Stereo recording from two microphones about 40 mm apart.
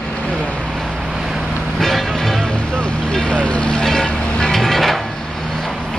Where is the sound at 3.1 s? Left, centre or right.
Left.